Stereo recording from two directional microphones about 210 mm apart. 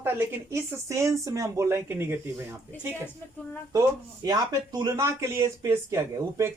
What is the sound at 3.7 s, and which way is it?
Speech, 15° right (ahead or behind).